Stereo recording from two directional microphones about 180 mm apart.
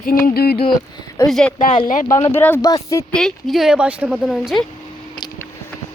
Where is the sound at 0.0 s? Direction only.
55° left (ahead or behind).